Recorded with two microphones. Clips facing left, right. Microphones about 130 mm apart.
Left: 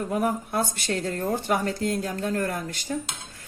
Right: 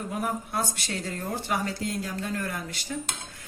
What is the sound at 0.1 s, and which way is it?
Speech, 50° left (ahead or behind).